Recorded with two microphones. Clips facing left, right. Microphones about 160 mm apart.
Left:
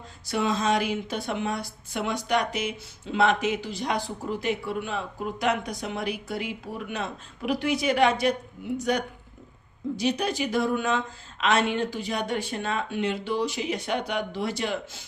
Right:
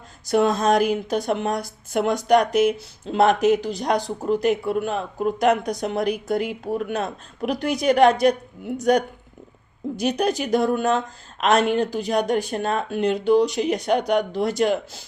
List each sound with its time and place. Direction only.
0.3 s speech: 45° right (ahead or behind)